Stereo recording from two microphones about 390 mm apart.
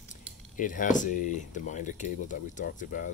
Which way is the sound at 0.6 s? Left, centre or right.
Centre.